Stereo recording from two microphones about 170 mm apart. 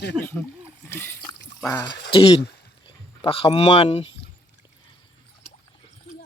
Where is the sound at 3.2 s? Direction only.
30° left (ahead or behind).